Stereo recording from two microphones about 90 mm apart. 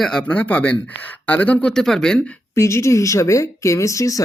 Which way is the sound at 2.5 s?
30° left (ahead or behind).